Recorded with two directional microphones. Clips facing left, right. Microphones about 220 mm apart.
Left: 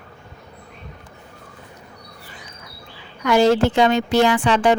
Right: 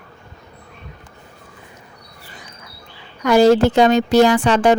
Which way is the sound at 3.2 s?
40° right (ahead or behind).